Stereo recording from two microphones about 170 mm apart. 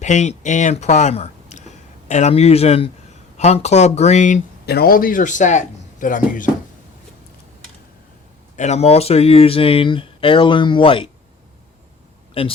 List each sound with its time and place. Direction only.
0.0 s speech: 45° left (ahead or behind)
4.6 s a man's voice: 65° left (ahead or behind); by 6.4 s 50° left (ahead or behind)
8.5 s speech: 40° left (ahead or behind)